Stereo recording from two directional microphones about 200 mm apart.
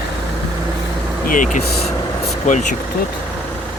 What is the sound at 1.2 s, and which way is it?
Speech, 40° left (ahead or behind).